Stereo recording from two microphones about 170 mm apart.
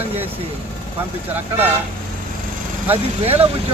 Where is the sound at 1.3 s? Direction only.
10° right (ahead or behind).